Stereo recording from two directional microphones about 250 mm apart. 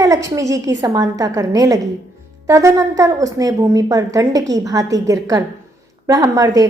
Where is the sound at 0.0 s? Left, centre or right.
Centre.